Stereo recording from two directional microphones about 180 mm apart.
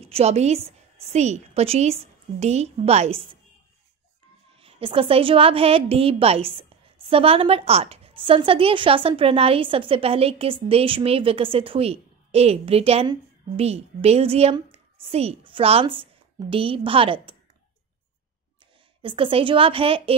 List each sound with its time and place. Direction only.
0.0 s a woman's voice: 35° right (ahead or behind)
4.6 s a woman's voice: 30° right (ahead or behind)
19.0 s a woman's voice: 30° right (ahead or behind)